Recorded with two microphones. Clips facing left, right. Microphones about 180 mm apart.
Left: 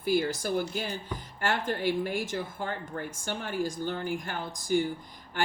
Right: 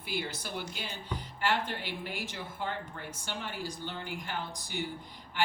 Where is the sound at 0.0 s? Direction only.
45° left (ahead or behind).